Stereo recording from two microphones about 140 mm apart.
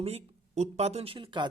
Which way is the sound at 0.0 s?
50° right (ahead or behind).